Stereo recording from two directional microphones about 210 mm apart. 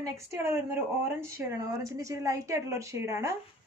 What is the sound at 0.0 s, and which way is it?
Speech, 15° right (ahead or behind).